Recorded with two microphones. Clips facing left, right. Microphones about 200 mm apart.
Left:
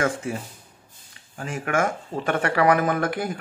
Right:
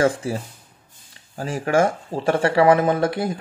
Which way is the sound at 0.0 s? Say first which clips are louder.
Right 5 dB; 35° right (ahead or behind).